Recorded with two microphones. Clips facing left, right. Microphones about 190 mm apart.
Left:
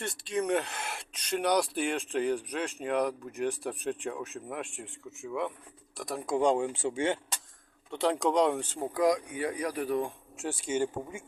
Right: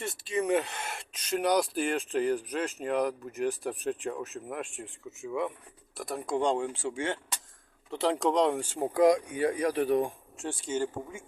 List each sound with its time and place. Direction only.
0.0 s speech: centre (ahead or behind); by 7.2 s 20° left (ahead or behind)
7.9 s speech: centre (ahead or behind)
8.9 s speech: 25° right (ahead or behind)
10.3 s speech: 5° left (ahead or behind)